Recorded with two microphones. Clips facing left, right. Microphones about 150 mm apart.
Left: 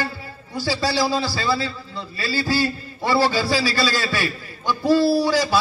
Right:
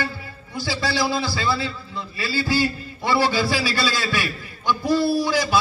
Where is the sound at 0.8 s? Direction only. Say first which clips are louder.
Left 1 dB; 35° left (ahead or behind).